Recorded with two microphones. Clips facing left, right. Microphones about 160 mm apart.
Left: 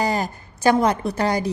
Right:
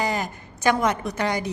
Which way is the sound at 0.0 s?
35° left (ahead or behind).